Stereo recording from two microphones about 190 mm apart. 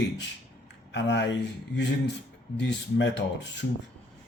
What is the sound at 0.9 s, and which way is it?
Speech, 70° left (ahead or behind).